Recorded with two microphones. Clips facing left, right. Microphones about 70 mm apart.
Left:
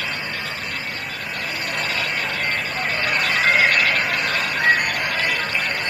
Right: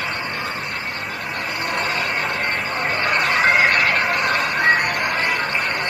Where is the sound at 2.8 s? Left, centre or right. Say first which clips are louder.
Right 3 dB; right.